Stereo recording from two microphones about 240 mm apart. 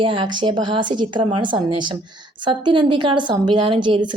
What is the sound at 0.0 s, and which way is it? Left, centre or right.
A woman's voice, right.